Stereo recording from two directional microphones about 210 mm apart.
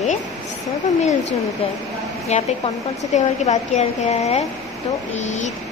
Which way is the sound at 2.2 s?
30° left (ahead or behind).